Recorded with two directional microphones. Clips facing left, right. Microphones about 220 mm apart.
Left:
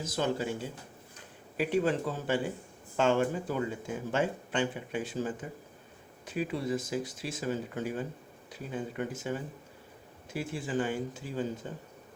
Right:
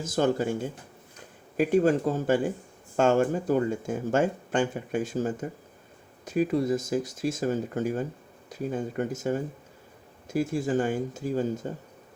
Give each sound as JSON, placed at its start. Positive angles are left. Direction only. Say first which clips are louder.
{"t": 0.0, "sound": "speech", "louder": "right 6 dB", "side_deg": -50}